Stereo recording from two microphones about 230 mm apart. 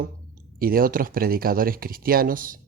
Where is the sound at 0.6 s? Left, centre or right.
Right.